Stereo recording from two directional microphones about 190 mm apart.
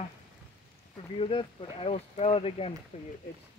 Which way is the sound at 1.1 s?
30° left (ahead or behind).